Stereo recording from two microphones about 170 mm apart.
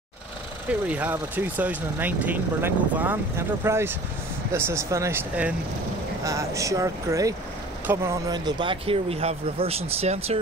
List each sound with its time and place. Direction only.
0.7 s speech: 10° right (ahead or behind); by 10.4 s 35° right (ahead or behind)